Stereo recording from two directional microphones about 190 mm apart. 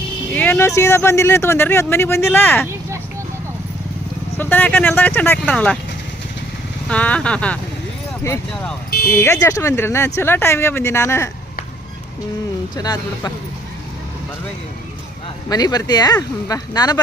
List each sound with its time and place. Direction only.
0.3 s speech: 10° left (ahead or behind)
4.4 s speech: 10° left (ahead or behind)
6.8 s speech: 5° left (ahead or behind)
12.7 s speech: 20° left (ahead or behind)
15.4 s speech: 20° left (ahead or behind)